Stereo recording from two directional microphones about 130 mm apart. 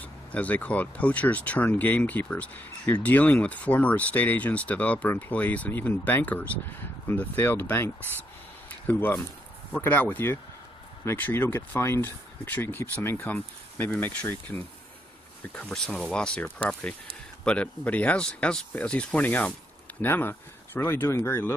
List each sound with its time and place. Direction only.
0.3 s speech: 10° left (ahead or behind)